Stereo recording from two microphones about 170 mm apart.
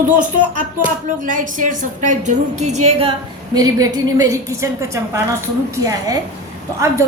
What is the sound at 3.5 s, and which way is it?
A woman's voice, 20° right (ahead or behind).